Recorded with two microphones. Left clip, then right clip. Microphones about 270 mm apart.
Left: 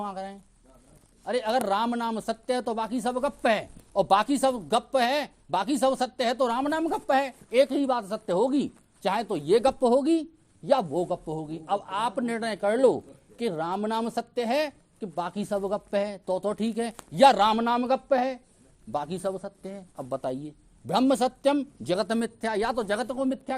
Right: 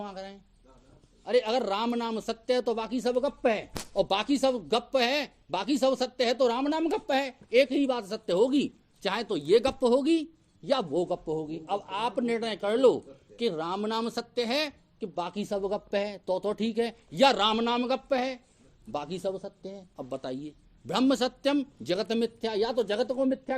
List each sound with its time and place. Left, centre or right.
0.0 s speech: left
23.0 s speech: left